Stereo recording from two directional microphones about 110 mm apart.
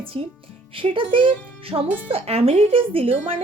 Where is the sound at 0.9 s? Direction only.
50° right (ahead or behind).